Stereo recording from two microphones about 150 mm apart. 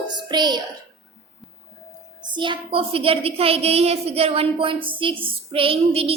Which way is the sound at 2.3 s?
30° right (ahead or behind).